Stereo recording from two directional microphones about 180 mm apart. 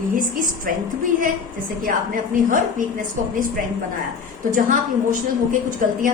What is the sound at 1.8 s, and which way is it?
A woman's voice, 50° right (ahead or behind).